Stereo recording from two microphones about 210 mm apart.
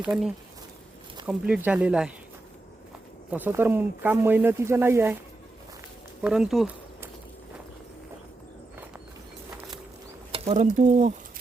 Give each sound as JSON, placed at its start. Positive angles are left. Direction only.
{"t": 0.0, "sound": "speech", "side_deg": 0}
{"t": 1.3, "sound": "speech", "side_deg": -5}
{"t": 3.3, "sound": "speech", "side_deg": -10}
{"t": 6.2, "sound": "speech", "side_deg": -5}
{"t": 10.3, "sound": "speech", "side_deg": -30}